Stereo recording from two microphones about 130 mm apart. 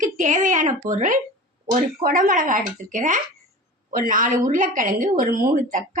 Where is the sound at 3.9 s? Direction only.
90° right.